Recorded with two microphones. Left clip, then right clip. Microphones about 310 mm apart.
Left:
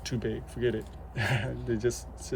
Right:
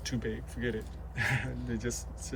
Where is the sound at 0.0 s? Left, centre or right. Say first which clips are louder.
Left 3 dB; centre.